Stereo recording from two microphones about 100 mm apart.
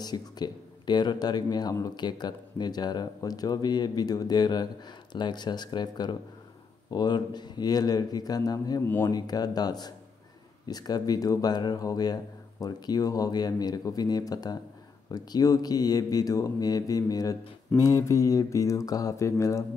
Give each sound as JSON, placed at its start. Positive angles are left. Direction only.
{"t": 0.0, "sound": "speech", "side_deg": 45}
{"t": 8.8, "sound": "speech", "side_deg": 20}
{"t": 9.1, "sound": "speech", "side_deg": 40}